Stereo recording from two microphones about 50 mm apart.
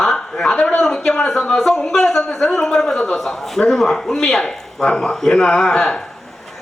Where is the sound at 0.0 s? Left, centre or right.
Centre.